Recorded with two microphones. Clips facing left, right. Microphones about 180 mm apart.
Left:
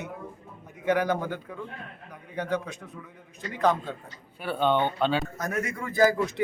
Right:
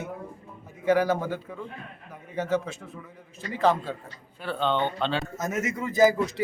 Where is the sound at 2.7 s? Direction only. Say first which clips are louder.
Right 1 dB; 15° left (ahead or behind).